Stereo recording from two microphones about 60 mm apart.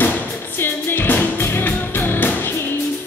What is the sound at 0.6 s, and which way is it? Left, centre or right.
Music, left.